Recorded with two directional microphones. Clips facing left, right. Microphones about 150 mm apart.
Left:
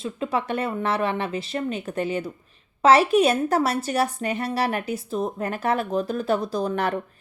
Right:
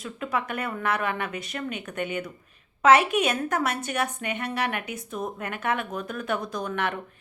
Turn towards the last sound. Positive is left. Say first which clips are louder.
# left 5 dB
turn(degrees=35)  # may be behind; listen again after turning